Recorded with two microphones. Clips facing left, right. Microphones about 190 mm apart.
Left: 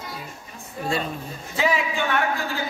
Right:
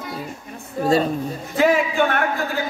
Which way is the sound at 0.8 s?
40° right (ahead or behind).